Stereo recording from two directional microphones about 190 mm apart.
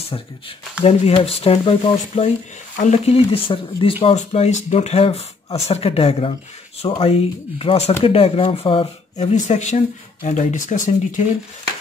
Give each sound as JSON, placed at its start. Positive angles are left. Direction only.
{"t": 0.1, "sound": "speech", "side_deg": 25}